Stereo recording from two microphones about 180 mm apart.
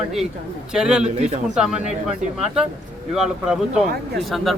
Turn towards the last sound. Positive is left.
turn(degrees=0)  # may be behind; listen again after turning